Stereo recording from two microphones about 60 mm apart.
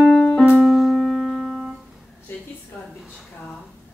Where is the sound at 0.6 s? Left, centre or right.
Centre.